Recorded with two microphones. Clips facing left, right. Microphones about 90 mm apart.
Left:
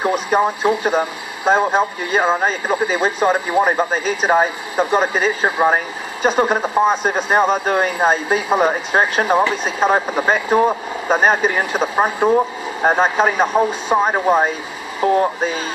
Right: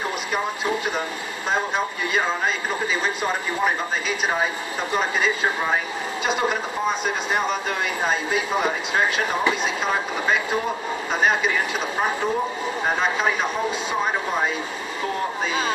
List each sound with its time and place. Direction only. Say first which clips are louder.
0.0 s speech: left 9 dB; 40° left (ahead or behind)